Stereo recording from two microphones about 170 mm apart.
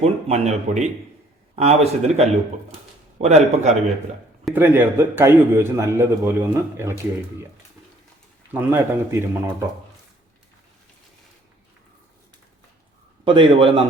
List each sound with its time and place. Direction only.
0.0 s speech: 40° right (ahead or behind)
4.5 s a man's voice: 10° right (ahead or behind)
8.5 s a man's voice: 10° right (ahead or behind)
13.2 s speech: 30° right (ahead or behind)